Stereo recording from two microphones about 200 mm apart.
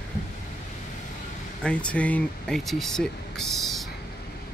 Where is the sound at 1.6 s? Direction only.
5° left (ahead or behind).